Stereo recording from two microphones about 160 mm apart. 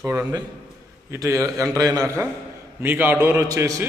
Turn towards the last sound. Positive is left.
turn(degrees=-20)  # may be behind; listen again after turning